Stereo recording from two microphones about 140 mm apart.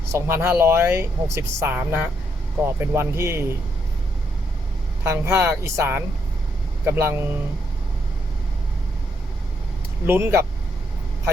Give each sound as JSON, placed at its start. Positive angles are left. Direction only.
{"t": 0.1, "sound": "speech", "side_deg": -20}
{"t": 5.0, "sound": "speech", "side_deg": -20}
{"t": 10.1, "sound": "speech", "side_deg": -15}